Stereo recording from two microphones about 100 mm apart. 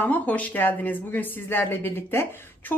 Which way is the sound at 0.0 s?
15° left (ahead or behind).